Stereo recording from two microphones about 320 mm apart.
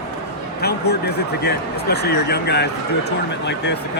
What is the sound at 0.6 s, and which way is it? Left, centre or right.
Speech, left.